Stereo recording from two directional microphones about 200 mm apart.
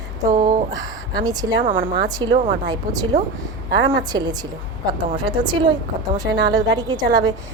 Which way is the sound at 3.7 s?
60° right (ahead or behind).